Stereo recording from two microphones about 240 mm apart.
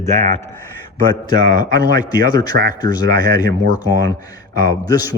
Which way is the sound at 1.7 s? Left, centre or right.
Centre.